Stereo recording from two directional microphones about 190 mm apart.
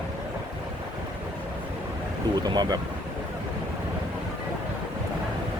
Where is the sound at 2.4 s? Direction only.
20° right (ahead or behind).